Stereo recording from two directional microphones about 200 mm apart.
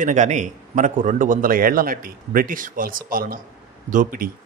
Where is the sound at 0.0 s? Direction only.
35° right (ahead or behind).